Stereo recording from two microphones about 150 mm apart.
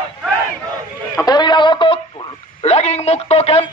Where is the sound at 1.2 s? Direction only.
30° left (ahead or behind).